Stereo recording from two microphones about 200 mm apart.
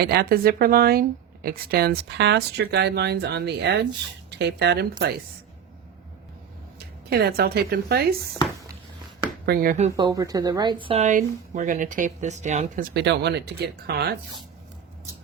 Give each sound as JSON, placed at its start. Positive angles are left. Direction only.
{"t": 0.0, "sound": "speech", "side_deg": -50}
{"t": 6.7, "sound": "speech", "side_deg": -50}
{"t": 9.5, "sound": "speech", "side_deg": -45}
{"t": 10.0, "sound": "speech", "side_deg": -20}
{"t": 12.9, "sound": "speech", "side_deg": -60}